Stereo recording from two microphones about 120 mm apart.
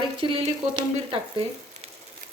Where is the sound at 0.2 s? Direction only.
45° right (ahead or behind).